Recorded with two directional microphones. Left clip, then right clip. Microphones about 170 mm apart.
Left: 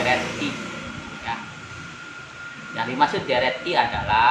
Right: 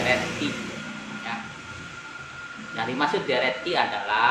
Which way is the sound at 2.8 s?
15° left (ahead or behind).